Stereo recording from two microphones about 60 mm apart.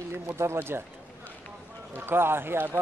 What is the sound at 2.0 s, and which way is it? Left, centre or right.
Speech, right.